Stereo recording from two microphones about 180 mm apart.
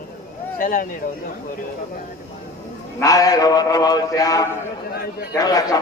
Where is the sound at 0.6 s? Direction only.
50° left (ahead or behind).